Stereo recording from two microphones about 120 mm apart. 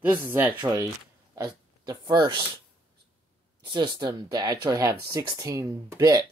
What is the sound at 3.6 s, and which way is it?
Speech, 40° right (ahead or behind).